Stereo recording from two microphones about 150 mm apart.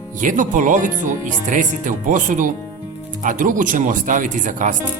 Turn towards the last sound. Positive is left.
turn(degrees=-60)  # may be behind; listen again after turning